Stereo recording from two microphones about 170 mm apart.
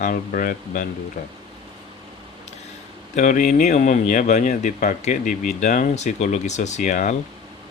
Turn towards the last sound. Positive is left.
turn(degrees=45)  # may be behind; listen again after turning